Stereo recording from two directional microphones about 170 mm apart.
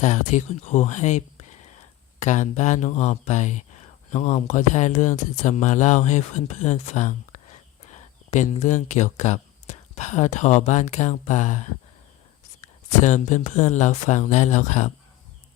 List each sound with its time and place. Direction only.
0.0 s speech: 45° left (ahead or behind)
13.0 s speech: 45° left (ahead or behind)